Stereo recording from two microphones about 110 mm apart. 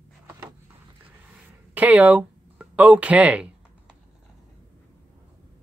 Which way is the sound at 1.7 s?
15° right (ahead or behind).